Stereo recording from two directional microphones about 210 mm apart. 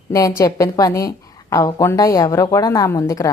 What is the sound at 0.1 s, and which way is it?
A woman's voice, 15° left (ahead or behind).